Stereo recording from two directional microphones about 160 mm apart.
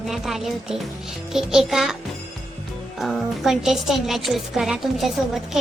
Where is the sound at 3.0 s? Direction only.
Centre (ahead or behind).